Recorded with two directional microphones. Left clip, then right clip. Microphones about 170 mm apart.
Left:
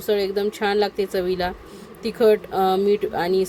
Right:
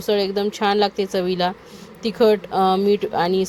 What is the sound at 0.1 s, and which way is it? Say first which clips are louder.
Speech: right 1 dB; 10° right (ahead or behind).